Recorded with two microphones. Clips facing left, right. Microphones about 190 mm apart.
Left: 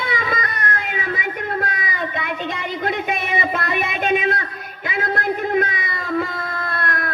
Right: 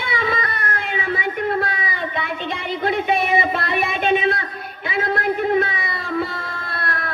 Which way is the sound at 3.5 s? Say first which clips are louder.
Right 1 dB; 45° left (ahead or behind).